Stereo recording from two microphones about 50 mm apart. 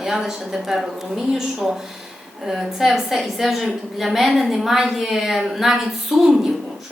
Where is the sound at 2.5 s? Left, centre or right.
Centre.